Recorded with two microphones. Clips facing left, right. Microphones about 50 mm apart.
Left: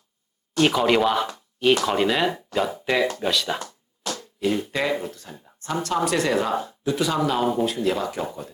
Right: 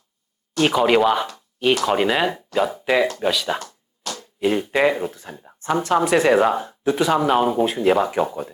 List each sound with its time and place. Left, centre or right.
0.6 s speech: centre
3.6 s a sound: centre
4.4 s speech: right